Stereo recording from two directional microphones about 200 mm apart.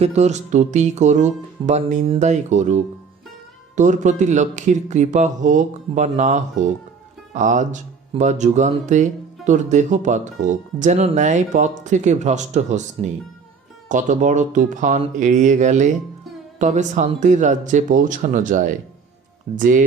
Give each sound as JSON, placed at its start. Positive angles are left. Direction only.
{"t": 0.0, "sound": "speech", "side_deg": -35}